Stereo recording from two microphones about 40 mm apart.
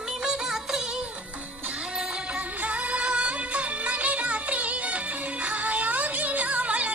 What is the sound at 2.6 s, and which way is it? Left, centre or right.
Music, right.